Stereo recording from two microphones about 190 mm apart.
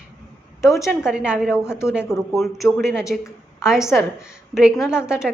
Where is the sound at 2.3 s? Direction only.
Centre (ahead or behind).